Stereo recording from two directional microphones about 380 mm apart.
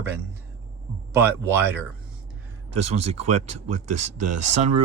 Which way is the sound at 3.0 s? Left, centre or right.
Right.